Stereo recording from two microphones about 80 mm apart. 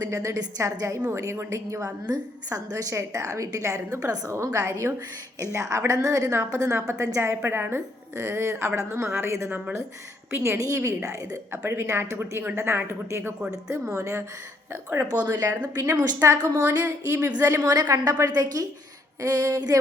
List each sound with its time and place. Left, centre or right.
0.0 s a woman's voice: right
2.9 s a woman's voice: right
10.6 s a woman's voice: right
15.3 s a woman's voice: right
16.6 s a woman's voice: right
17.7 s a woman's voice: right